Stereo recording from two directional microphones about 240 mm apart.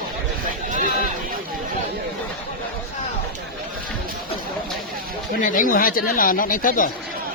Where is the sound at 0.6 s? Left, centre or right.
Right.